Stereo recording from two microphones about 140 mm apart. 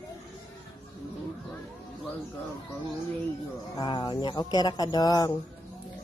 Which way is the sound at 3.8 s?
35° left (ahead or behind).